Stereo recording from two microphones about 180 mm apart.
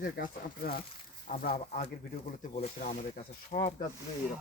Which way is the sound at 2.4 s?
35° left (ahead or behind).